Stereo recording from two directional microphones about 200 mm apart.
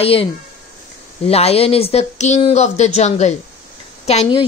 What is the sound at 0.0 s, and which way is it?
A woman's voice, 30° left (ahead or behind).